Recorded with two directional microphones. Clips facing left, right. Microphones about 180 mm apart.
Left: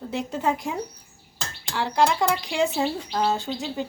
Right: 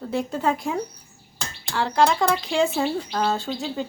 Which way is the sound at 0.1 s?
20° left (ahead or behind).